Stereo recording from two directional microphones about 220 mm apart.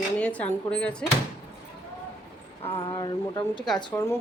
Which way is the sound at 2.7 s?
25° left (ahead or behind).